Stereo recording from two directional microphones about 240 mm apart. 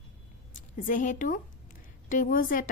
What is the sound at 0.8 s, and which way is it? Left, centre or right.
A woman's voice, left.